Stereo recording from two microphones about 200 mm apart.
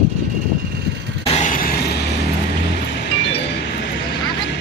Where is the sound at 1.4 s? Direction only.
45° left (ahead or behind).